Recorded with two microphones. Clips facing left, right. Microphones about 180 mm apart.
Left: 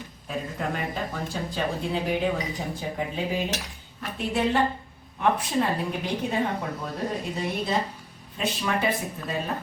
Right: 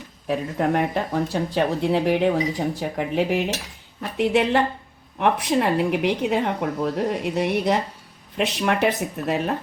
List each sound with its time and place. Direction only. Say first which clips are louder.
0.3 s speech: right 8 dB; 70° right (ahead or behind)